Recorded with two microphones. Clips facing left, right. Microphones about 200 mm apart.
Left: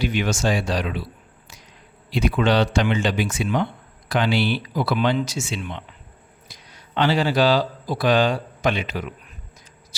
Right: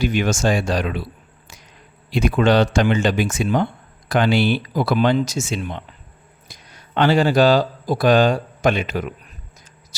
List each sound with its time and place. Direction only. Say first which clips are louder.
0.0 s speech: right 3 dB; 45° right (ahead or behind)
2.0 s speech: right 3 dB; 50° right (ahead or behind)